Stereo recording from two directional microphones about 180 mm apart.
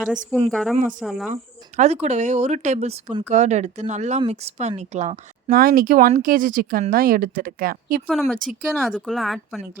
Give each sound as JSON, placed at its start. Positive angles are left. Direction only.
{"t": 0.3, "sound": "speech", "side_deg": 5}
{"t": 1.3, "sound": "speech", "side_deg": -40}
{"t": 5.5, "sound": "speech", "side_deg": -55}
{"t": 8.0, "sound": "speech", "side_deg": 0}